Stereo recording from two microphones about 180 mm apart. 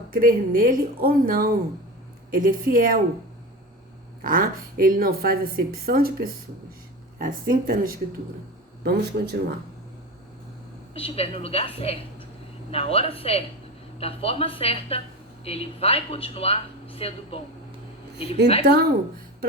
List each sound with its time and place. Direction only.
0.1 s speech: 55° right (ahead or behind)
4.2 s a woman's voice: 50° right (ahead or behind)
8.8 s a woman's voice: 65° right (ahead or behind)
10.9 s speech: 30° left (ahead or behind)
18.6 s a woman's voice: 65° right (ahead or behind)